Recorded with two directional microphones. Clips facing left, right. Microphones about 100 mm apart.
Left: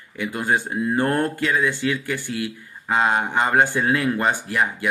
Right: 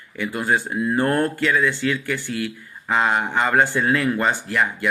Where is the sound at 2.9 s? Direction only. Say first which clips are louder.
Even; 30° left (ahead or behind).